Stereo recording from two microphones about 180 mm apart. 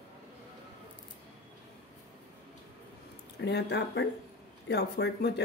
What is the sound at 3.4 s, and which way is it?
Speech, 70° left (ahead or behind).